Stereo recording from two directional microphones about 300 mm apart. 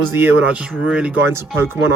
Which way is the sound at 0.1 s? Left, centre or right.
Centre.